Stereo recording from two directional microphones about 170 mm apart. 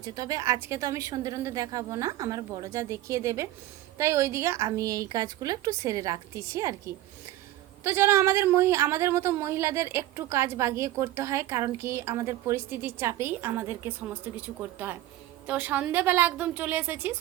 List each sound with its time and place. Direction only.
0.0 s a woman's voice: 20° right (ahead or behind)